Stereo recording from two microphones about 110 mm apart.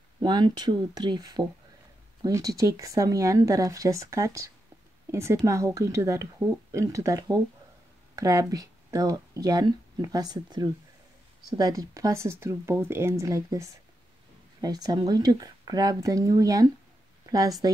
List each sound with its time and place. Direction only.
0.2 s speech: 40° right (ahead or behind)